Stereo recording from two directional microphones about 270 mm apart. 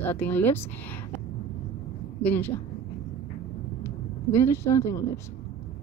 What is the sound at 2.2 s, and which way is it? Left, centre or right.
Speech, centre.